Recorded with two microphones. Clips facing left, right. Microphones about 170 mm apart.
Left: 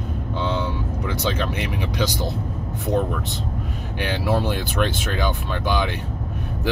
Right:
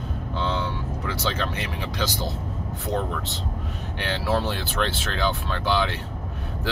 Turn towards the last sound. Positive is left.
turn(degrees=15)  # may be behind; listen again after turning